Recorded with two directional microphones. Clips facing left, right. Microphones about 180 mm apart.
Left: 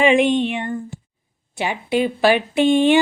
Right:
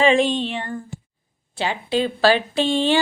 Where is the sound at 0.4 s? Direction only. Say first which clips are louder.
Left 4 dB; 15° left (ahead or behind).